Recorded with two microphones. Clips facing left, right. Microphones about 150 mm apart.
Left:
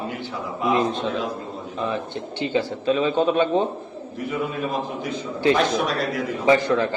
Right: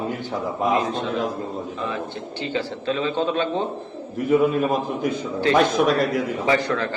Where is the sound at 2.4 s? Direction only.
15° left (ahead or behind).